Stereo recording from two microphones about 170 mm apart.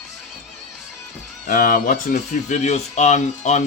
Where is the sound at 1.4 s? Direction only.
55° left (ahead or behind).